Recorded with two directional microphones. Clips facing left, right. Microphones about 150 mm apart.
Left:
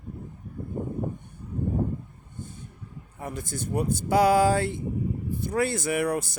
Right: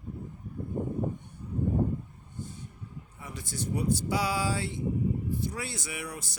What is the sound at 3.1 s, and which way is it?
Speech, 50° left (ahead or behind).